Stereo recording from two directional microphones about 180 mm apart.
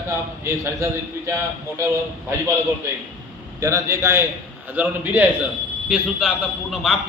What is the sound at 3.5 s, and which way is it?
A man's voice, 15° right (ahead or behind).